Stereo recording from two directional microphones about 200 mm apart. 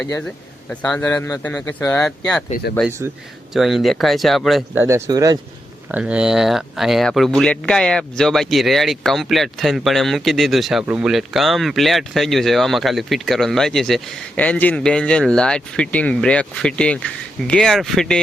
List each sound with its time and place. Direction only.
0.7 s a man's voice: 5° left (ahead or behind)
2.5 s speech: 50° left (ahead or behind)
3.5 s speech: centre (ahead or behind)
4.8 s speech: 15° right (ahead or behind)
5.9 s speech: 5° right (ahead or behind)